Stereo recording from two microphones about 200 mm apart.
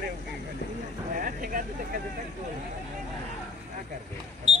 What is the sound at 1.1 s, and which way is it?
Speech, 45° right (ahead or behind).